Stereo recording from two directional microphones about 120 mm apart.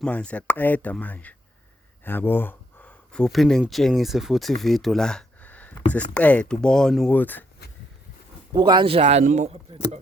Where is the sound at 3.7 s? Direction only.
Centre (ahead or behind).